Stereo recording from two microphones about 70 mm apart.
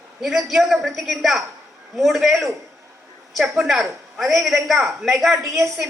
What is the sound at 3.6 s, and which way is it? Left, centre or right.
A woman's voice, centre.